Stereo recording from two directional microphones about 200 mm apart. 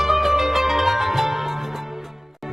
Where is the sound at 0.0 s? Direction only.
Centre (ahead or behind).